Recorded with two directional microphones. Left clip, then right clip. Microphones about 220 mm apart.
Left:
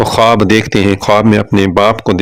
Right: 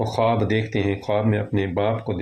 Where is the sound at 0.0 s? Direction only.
40° left (ahead or behind).